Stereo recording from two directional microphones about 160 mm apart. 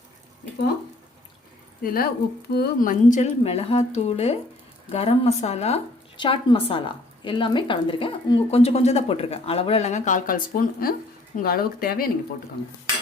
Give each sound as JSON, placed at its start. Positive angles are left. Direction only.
{"t": 1.8, "sound": "a woman's voice", "side_deg": 65}